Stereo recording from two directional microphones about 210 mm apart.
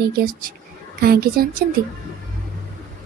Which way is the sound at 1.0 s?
45° right (ahead or behind).